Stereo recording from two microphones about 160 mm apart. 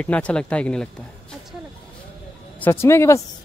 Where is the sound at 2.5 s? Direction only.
15° left (ahead or behind).